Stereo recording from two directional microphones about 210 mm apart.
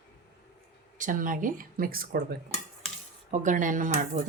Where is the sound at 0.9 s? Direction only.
40° right (ahead or behind).